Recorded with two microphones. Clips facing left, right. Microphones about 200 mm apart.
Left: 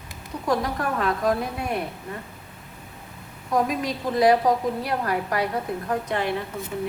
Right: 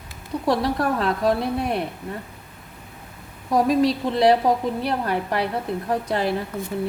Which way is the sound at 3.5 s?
35° right (ahead or behind).